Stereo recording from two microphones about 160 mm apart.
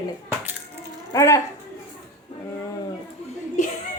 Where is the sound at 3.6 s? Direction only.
50° left (ahead or behind).